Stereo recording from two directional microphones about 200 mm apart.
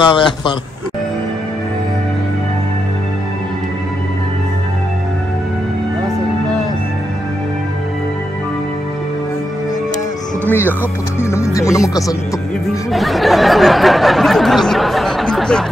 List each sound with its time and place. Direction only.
0.0 s a man's voice: 25° left (ahead or behind)
11.1 s speech: 15° left (ahead or behind)
12.9 s speech: centre (ahead or behind)